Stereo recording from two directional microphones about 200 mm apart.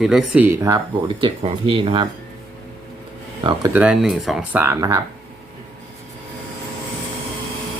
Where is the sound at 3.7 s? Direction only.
5° right (ahead or behind).